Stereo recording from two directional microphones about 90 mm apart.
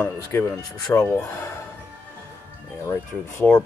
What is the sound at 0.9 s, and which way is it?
Speech, 35° left (ahead or behind).